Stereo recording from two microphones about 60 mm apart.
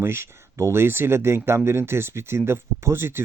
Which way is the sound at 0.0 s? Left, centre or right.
Right.